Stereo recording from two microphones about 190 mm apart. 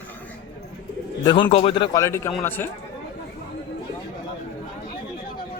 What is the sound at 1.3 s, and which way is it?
Speech, 25° left (ahead or behind).